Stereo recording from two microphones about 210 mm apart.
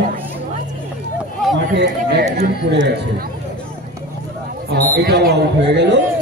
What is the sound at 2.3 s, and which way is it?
Speech, 55° right (ahead or behind).